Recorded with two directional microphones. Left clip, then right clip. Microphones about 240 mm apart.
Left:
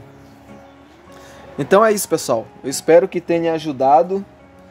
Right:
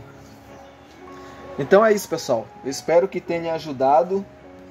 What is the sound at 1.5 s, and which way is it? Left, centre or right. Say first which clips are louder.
Speech: left 2 dB; left.